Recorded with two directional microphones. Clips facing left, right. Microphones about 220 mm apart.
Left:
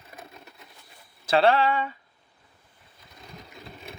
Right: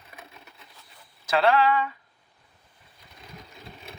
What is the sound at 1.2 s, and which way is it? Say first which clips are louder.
Speech: left 1 dB; 30° left (ahead or behind).